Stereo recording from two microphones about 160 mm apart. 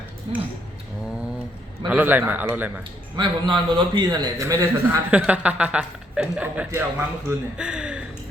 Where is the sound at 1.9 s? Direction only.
10° right (ahead or behind).